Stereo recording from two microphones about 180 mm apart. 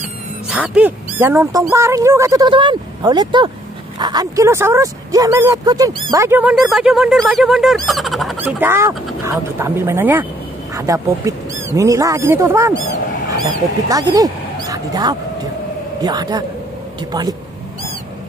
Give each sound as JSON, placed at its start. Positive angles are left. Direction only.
{"t": 0.5, "sound": "speech", "side_deg": -10}
{"t": 6.2, "sound": "speech", "side_deg": -10}
{"t": 8.4, "sound": "speech", "side_deg": -10}
{"t": 13.8, "sound": "speech", "side_deg": -20}